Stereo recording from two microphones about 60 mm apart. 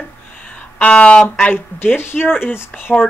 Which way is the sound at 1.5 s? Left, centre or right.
Left.